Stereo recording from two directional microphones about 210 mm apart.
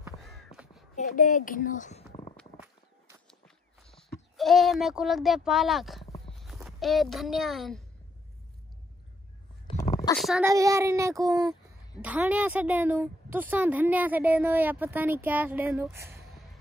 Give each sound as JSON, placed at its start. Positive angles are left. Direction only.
{"t": 0.2, "sound": "crow", "side_deg": 0}
{"t": 0.9, "sound": "a woman's voice", "side_deg": 40}
{"t": 3.3, "sound": "walk", "side_deg": 0}
{"t": 6.2, "sound": "clip-clop", "side_deg": 0}
{"t": 10.1, "sound": "a child's voice", "side_deg": 0}
{"t": 10.4, "sound": "a woman's voice", "side_deg": -15}